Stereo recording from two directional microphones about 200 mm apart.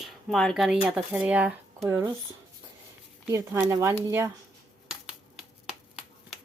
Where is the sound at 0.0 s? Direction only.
Centre (ahead or behind).